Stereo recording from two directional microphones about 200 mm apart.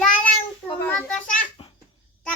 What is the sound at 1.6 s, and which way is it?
Babbling, 25° left (ahead or behind).